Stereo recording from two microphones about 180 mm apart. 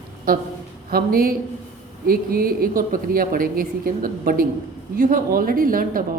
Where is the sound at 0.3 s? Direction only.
55° right (ahead or behind).